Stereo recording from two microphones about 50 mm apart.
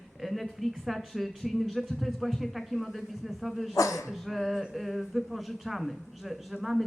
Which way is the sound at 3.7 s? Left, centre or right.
Left.